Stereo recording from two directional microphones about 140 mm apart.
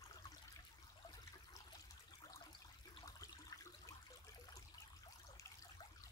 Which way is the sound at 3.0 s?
25° left (ahead or behind).